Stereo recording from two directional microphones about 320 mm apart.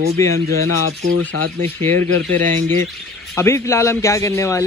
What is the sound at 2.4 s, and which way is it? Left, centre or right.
Speech, right.